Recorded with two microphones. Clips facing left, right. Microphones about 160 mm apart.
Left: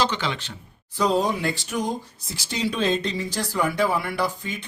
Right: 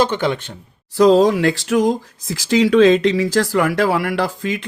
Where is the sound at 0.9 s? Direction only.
90° right.